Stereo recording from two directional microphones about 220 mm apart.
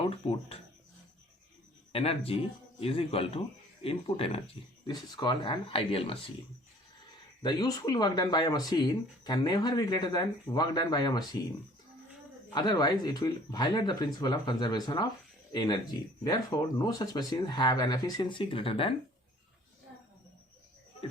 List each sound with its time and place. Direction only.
0.0 s speech: 25° left (ahead or behind)
1.9 s speech: 25° left (ahead or behind)
7.4 s speech: 20° left (ahead or behind)
12.5 s speech: 20° left (ahead or behind)